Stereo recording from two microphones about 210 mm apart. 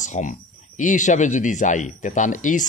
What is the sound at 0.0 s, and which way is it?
A man's voice, 35° left (ahead or behind).